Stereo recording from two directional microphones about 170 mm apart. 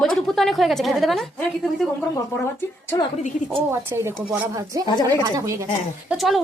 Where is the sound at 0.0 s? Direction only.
Centre (ahead or behind).